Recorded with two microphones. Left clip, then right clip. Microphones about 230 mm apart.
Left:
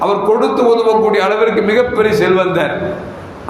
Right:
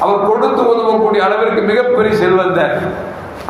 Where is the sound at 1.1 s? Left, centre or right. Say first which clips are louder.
Even; left.